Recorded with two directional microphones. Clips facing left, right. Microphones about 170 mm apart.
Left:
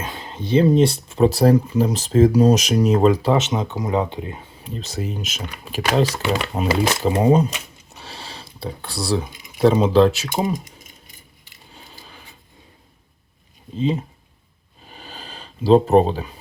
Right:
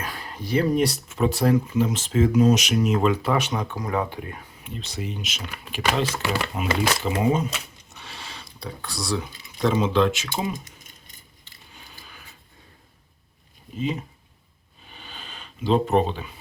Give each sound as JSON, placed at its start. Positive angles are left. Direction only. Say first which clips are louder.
{"t": 0.0, "sound": "speech", "louder": "left 3 dB", "side_deg": 25}
{"t": 3.3, "sound": "speech", "louder": "left 4 dB", "side_deg": 20}
{"t": 4.6, "sound": "speech", "louder": "left 5 dB", "side_deg": 40}
{"t": 7.9, "sound": "a sound", "louder": "left 4 dB", "side_deg": 35}
{"t": 9.2, "sound": "speech", "louder": "left 3 dB", "side_deg": 15}
{"t": 9.6, "sound": "speech", "louder": "left 6 dB", "side_deg": 35}
{"t": 11.7, "sound": "a sound", "louder": "left 4 dB", "side_deg": 30}
{"t": 13.7, "sound": "speech", "louder": "left 6 dB", "side_deg": 30}
{"t": 14.8, "sound": "a sound", "louder": "left 4 dB", "side_deg": 40}